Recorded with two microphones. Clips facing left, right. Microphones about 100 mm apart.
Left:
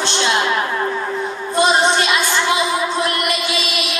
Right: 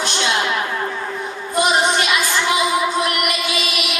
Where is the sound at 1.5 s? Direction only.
30° left (ahead or behind).